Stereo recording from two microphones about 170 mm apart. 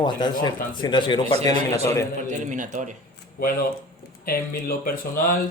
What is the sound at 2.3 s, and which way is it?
Speech, 50° right (ahead or behind).